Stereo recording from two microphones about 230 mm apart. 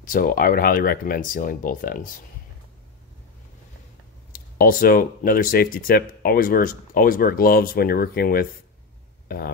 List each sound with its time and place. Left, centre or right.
0.0 s speech: left
4.3 s speech: left